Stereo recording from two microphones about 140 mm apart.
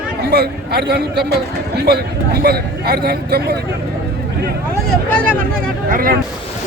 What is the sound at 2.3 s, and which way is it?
Speech, 90° right.